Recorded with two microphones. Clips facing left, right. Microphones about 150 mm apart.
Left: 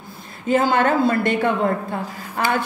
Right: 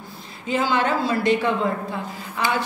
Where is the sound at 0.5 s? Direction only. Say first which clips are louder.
Left 4 dB; 50° left (ahead or behind).